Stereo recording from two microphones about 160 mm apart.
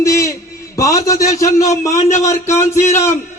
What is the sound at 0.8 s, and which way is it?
A man's voice, 20° left (ahead or behind).